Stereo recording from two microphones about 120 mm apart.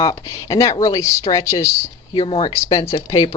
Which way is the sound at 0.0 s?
35° left (ahead or behind).